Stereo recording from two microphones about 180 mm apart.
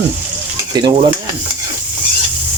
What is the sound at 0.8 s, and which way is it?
Speech, 20° right (ahead or behind).